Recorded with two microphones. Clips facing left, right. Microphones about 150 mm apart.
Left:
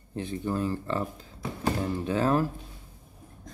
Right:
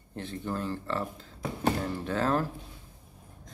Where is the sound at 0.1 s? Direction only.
15° left (ahead or behind).